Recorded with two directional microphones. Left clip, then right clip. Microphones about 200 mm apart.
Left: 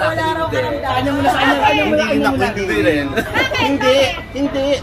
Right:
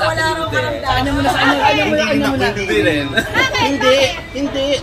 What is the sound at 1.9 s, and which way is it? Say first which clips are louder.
Speech: even; 20° right (ahead or behind).